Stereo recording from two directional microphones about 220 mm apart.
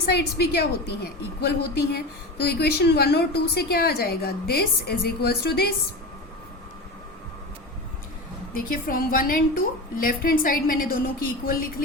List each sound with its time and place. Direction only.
0.1 s a woman's voice: 45° left (ahead or behind)
8.5 s a woman's voice: 40° left (ahead or behind)